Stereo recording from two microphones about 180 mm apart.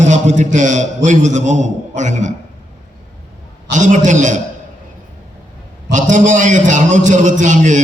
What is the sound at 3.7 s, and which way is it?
Speech, 45° right (ahead or behind).